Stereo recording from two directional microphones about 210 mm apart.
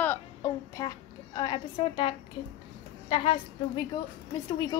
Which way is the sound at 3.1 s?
25° left (ahead or behind).